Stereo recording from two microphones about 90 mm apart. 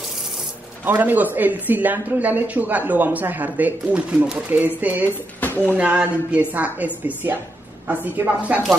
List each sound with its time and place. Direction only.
0.8 s a woman's voice: 20° right (ahead or behind)
5.4 s a sound: 20° left (ahead or behind)
5.8 s a woman's voice: 15° right (ahead or behind)